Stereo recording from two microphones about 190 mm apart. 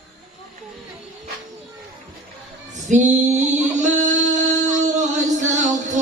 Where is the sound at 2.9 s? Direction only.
40° right (ahead or behind).